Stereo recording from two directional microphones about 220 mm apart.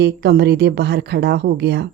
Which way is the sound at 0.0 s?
50° right (ahead or behind).